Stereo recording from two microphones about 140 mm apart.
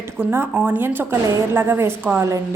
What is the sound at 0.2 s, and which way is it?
A woman's voice, 15° right (ahead or behind).